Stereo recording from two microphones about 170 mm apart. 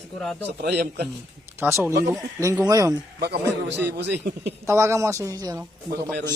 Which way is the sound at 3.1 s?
75° right (ahead or behind).